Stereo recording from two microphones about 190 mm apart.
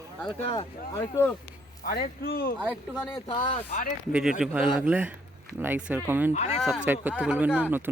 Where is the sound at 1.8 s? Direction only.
50° left (ahead or behind).